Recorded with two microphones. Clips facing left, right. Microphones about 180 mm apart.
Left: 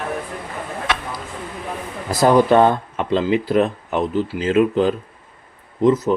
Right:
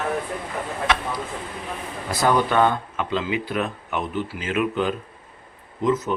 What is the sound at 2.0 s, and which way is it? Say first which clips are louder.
Speech: left 7 dB; 35° left (ahead or behind).